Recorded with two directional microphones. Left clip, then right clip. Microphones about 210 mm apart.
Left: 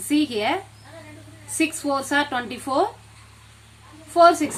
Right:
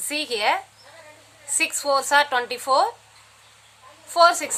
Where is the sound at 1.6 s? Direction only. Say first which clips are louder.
Right 2 dB; 15° right (ahead or behind).